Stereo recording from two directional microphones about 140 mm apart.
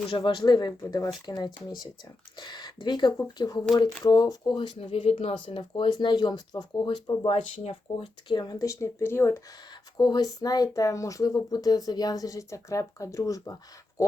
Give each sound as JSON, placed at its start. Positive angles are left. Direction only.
{"t": 0.3, "sound": "speech", "side_deg": 30}
{"t": 7.6, "sound": "speech", "side_deg": 45}
{"t": 10.0, "sound": "speech", "side_deg": 30}